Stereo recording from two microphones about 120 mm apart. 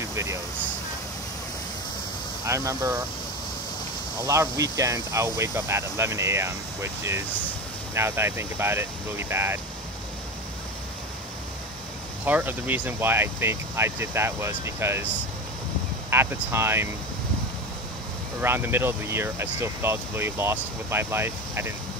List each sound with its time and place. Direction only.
0.0 s a sound: 25° right (ahead or behind)
2.4 s speech: 25° right (ahead or behind)
4.2 s speech: 25° right (ahead or behind)
12.3 s speech: 15° right (ahead or behind)
16.1 s speech: 20° right (ahead or behind)
18.4 s speech: 20° right (ahead or behind)